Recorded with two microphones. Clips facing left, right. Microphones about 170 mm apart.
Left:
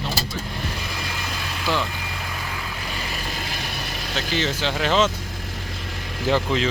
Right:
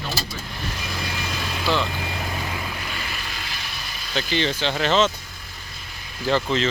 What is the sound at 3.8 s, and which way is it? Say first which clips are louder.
Vehicle: left 6 dB; 65° left (ahead or behind).